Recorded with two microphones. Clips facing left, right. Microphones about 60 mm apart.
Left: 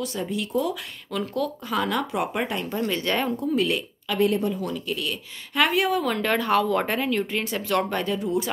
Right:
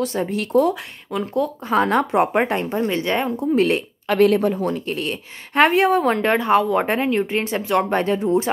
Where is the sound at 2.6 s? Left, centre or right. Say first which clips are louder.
Right 5 dB; right.